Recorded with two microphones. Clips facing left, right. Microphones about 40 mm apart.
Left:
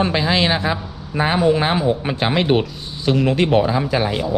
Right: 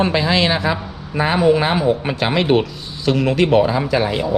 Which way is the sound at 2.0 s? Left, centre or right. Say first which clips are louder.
Right 1 dB; centre.